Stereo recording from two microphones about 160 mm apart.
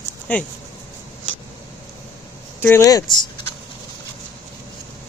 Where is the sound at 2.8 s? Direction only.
25° left (ahead or behind).